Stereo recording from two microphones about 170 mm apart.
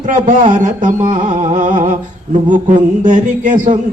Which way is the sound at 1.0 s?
35° right (ahead or behind).